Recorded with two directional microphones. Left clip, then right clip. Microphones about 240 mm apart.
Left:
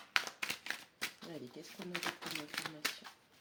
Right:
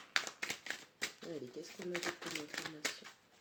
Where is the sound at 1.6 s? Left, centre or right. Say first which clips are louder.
Right 3 dB; left.